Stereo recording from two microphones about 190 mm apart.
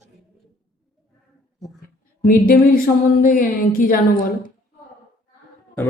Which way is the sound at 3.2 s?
50° left (ahead or behind).